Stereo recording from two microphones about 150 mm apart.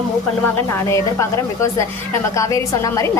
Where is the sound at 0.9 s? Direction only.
20° left (ahead or behind).